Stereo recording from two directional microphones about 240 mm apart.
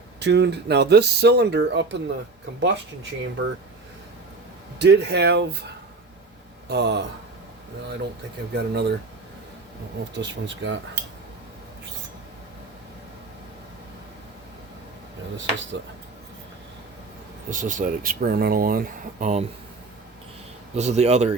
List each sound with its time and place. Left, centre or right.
0.2 s speech: right
4.8 s speech: right
6.7 s speech: right
8.5 s speech: right
10.2 s speech: right
17.5 s speech: right
20.7 s speech: right